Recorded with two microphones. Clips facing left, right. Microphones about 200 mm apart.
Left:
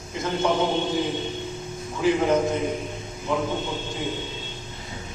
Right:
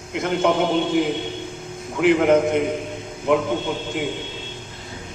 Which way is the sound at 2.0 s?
65° right (ahead or behind).